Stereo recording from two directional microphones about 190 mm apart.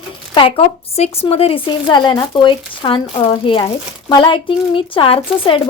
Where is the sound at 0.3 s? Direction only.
30° left (ahead or behind).